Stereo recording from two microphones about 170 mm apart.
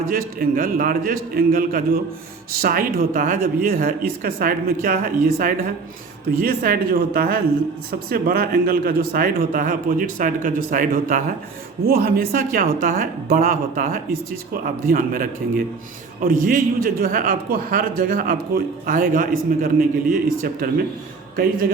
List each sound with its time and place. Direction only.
0.0 s a man's voice: 60° right (ahead or behind)